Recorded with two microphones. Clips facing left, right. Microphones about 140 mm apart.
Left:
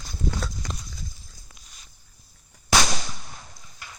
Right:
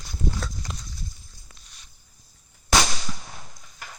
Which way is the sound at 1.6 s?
Centre (ahead or behind).